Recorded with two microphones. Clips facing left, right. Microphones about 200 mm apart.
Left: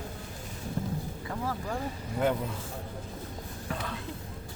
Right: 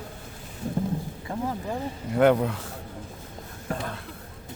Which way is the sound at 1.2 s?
20° right (ahead or behind).